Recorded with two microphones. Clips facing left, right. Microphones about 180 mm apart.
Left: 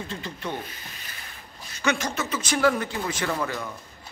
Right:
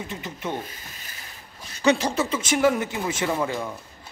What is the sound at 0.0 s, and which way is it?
Speech, 20° right (ahead or behind).